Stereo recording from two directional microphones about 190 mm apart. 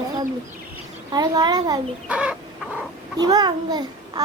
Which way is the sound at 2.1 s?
5° right (ahead or behind).